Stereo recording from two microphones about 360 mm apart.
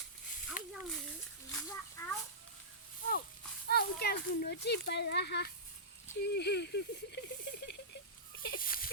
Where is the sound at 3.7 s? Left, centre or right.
Left.